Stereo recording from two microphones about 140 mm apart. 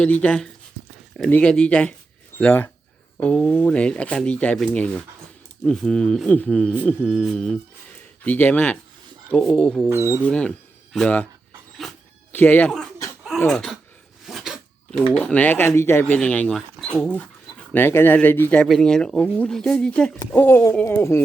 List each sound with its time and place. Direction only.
0.0 s speech: 10° left (ahead or behind)
8.2 s speech: 10° left (ahead or behind)
9.9 s speech: 20° right (ahead or behind)
10.2 s speech: 10° left (ahead or behind)
11.8 s dog: centre (ahead or behind)
12.3 s speech: 15° left (ahead or behind)
14.3 s dog: centre (ahead or behind)
14.9 s speech: 10° left (ahead or behind)
20.3 s speech: 15° left (ahead or behind)